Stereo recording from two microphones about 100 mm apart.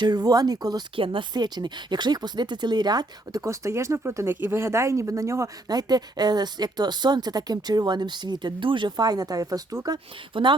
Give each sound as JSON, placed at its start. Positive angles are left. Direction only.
{"t": 0.0, "sound": "speech", "side_deg": -45}
{"t": 0.9, "sound": "speech", "side_deg": -60}
{"t": 3.4, "sound": "speech", "side_deg": -30}
{"t": 10.3, "sound": "speech", "side_deg": -55}